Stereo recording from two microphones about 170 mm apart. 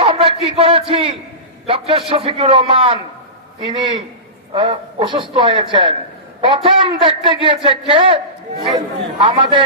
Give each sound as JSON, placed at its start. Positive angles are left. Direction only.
{"t": 0.0, "sound": "a sound", "side_deg": -30}
{"t": 1.6, "sound": "a man's voice", "side_deg": -30}
{"t": 9.2, "sound": "a man's voice", "side_deg": -30}